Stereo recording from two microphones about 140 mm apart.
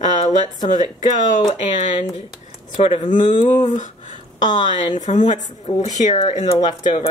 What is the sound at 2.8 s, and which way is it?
Speech, 45° left (ahead or behind).